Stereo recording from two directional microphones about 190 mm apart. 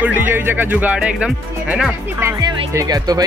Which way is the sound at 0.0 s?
10° right (ahead or behind).